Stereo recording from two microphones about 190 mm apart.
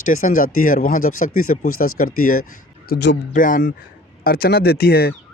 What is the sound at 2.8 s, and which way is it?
Speech, 60° left (ahead or behind).